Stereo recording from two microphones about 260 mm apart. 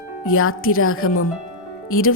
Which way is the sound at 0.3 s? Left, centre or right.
Left.